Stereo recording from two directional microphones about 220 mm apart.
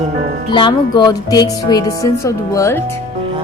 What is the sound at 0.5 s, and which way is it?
Music, 20° left (ahead or behind).